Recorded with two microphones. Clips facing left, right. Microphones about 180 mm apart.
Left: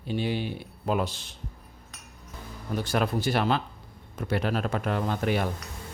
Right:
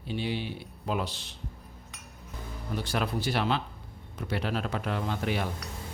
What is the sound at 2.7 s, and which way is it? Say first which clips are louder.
Speech: left 4 dB; 50° left (ahead or behind).